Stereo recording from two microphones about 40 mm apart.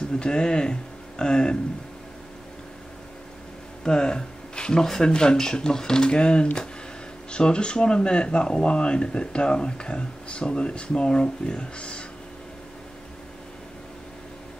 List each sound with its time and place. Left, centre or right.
0.1 s speech: left
3.8 s speech: centre
4.8 s speech: centre